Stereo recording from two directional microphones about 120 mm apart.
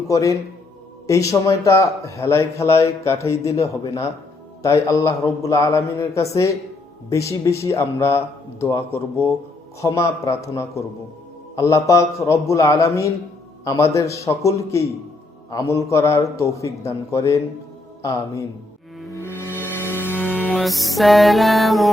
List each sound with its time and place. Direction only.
0.1 s speech: 30° left (ahead or behind)
19.2 s music: 20° left (ahead or behind)
20.1 s music: 10° right (ahead or behind)
20.5 s music: centre (ahead or behind)